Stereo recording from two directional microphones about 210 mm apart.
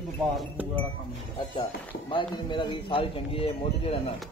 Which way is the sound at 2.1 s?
25° left (ahead or behind).